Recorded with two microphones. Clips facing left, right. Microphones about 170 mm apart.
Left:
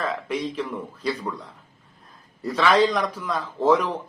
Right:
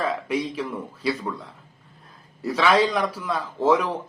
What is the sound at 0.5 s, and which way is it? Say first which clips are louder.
Speech: even; 10° right (ahead or behind).